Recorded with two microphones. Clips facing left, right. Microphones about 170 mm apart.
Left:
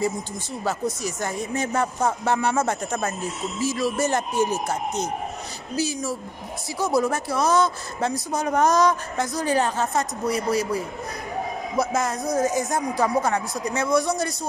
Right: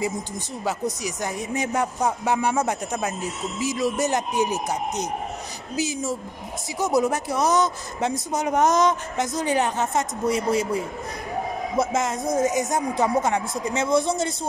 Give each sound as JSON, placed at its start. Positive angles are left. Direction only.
{"t": 0.7, "sound": "a man's voice", "side_deg": -15}